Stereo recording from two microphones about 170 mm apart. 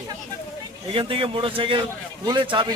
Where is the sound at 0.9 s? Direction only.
30° right (ahead or behind).